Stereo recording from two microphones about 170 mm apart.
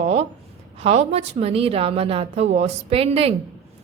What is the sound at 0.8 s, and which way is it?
A woman's voice, 40° right (ahead or behind).